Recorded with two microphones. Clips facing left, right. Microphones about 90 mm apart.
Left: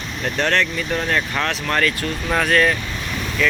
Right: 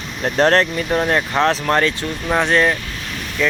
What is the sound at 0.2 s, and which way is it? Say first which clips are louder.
Speech: right 5 dB; 35° right (ahead or behind).